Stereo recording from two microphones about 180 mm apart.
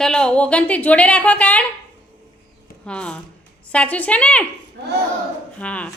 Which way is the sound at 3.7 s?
10° left (ahead or behind).